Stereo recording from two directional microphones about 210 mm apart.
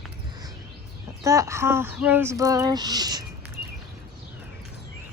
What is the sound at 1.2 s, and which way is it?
Speech, 15° right (ahead or behind).